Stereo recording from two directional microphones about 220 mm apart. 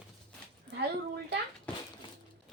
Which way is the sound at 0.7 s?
Centre (ahead or behind).